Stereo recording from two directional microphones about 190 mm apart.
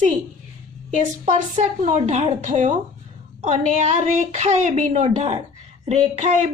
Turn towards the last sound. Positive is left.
turn(degrees=-35)  # may be behind; listen again after turning